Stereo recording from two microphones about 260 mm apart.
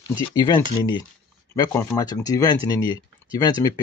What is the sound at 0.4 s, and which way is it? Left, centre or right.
Speech, centre.